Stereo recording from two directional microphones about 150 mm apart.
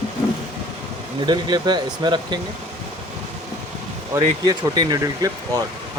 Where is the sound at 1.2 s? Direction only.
30° right (ahead or behind).